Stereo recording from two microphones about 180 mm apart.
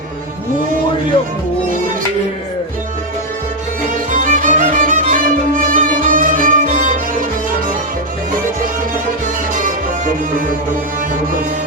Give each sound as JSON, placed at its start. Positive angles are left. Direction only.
{"t": 4.1, "sound": "music", "side_deg": -45}